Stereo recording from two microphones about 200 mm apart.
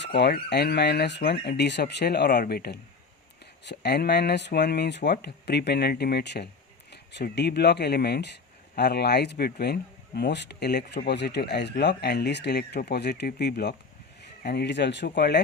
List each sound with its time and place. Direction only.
0.0 s speech: 55° left (ahead or behind)